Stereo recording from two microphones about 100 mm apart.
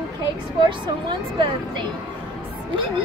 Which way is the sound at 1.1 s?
55° right (ahead or behind).